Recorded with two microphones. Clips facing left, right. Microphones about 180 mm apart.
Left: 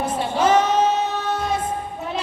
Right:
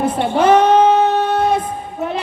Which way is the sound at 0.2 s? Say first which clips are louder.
Right 5 dB; 60° right (ahead or behind).